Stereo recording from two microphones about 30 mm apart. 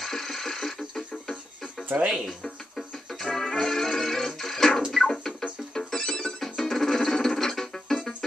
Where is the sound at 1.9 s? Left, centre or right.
Right.